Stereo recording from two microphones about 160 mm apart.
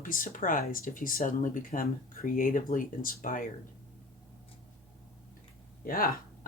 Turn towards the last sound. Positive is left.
turn(degrees=65)  # may be behind; listen again after turning